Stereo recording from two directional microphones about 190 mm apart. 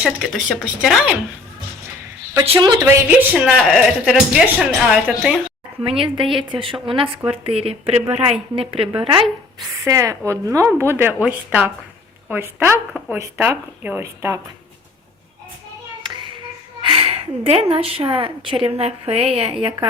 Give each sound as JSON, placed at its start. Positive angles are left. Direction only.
{"t": 0.0, "sound": "a woman's voice", "side_deg": 0}
{"t": 2.5, "sound": "a woman's voice", "side_deg": -25}
{"t": 2.8, "sound": "a woman's voice", "side_deg": -10}
{"t": 6.3, "sound": "a woman's voice", "side_deg": -25}
{"t": 9.8, "sound": "speech", "side_deg": -15}
{"t": 16.0, "sound": "music", "side_deg": -25}
{"t": 16.8, "sound": "a woman's voice", "side_deg": -30}